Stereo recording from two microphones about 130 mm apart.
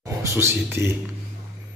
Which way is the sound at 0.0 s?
20° right (ahead or behind).